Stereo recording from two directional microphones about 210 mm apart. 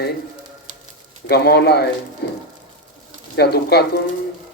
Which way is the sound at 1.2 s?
50° left (ahead or behind).